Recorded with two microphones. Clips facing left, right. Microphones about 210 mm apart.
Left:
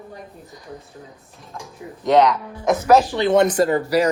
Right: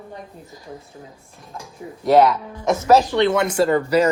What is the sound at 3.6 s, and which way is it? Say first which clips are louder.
Speech: even; 45° left (ahead or behind).